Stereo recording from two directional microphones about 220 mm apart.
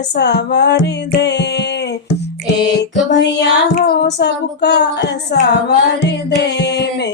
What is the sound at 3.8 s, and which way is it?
Female singing, 50° left (ahead or behind).